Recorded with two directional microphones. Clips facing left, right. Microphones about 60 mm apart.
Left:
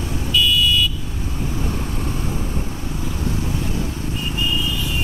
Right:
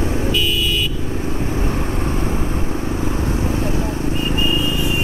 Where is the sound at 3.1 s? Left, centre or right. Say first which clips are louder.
Right 1 dB; right.